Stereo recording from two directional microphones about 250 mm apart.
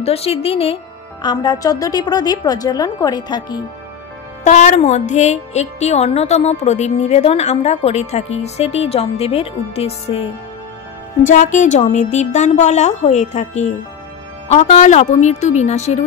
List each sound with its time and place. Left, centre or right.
0.0 s a woman's voice: left
4.5 s a woman's voice: left
11.2 s a woman's voice: left